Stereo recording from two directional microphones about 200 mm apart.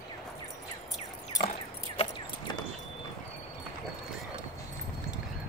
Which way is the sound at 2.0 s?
20° left (ahead or behind).